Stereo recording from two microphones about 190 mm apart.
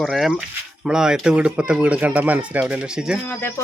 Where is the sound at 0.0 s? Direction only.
Centre (ahead or behind).